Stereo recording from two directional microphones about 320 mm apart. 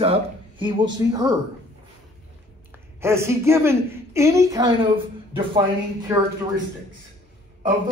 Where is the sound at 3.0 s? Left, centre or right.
Centre.